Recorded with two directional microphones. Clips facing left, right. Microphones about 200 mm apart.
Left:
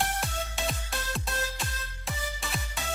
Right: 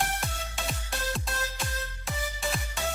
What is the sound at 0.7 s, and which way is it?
Music, centre (ahead or behind).